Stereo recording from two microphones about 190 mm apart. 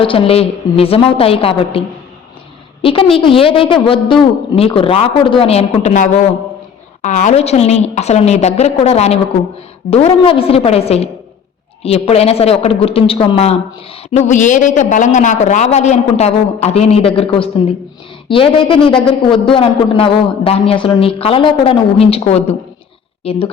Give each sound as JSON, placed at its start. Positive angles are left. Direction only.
{"t": 0.0, "sound": "speech", "side_deg": 30}
{"t": 2.8, "sound": "a man's voice", "side_deg": 30}